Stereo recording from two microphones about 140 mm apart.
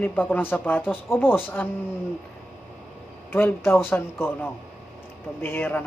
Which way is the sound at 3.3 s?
15° left (ahead or behind).